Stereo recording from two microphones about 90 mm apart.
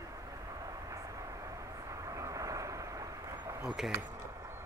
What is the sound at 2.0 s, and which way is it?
Vehicle, 40° right (ahead or behind).